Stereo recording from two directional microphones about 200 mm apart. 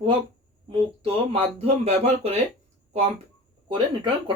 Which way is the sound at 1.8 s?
30° right (ahead or behind).